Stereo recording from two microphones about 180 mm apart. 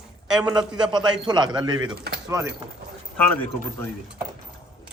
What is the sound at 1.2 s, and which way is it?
Speech, 25° right (ahead or behind).